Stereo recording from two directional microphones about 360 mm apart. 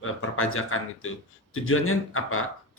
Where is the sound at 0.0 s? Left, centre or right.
Left.